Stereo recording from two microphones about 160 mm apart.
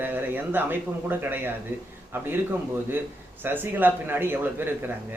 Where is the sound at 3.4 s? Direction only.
10° right (ahead or behind).